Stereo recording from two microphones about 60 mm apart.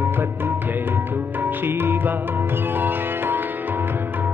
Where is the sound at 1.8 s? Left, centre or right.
Right.